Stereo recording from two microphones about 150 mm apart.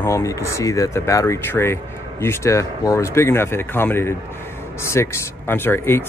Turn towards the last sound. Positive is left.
turn(degrees=15)  # may be behind; listen again after turning